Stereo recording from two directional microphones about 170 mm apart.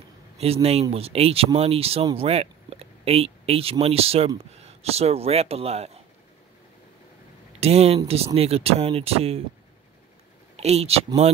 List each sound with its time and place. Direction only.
0.4 s speech: 35° right (ahead or behind)
7.6 s speech: 35° right (ahead or behind)
10.5 s speech: 40° right (ahead or behind)